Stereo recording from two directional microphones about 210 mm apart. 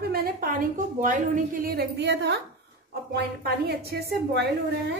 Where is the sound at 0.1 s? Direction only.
45° right (ahead or behind).